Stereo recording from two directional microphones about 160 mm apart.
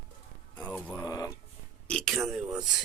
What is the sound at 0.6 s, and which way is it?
Music, 10° left (ahead or behind).